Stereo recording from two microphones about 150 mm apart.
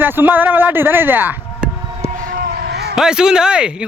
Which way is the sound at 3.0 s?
5° right (ahead or behind).